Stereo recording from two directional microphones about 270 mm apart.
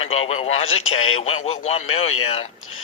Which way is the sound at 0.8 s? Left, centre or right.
Left.